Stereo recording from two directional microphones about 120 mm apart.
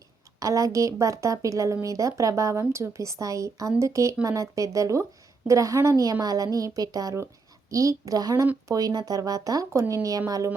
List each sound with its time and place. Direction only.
0.3 s a woman's voice: 30° right (ahead or behind)